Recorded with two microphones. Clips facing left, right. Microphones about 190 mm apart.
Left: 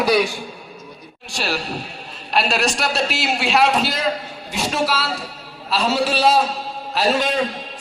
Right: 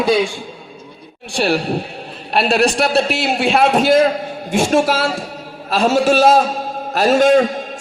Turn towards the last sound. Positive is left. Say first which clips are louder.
# right 9 dB
turn(degrees=-45)  # may be behind; listen again after turning